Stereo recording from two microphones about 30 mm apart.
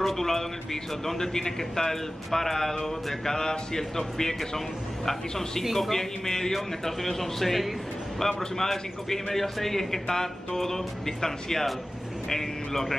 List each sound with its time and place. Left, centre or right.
0.0 s a man's voice: centre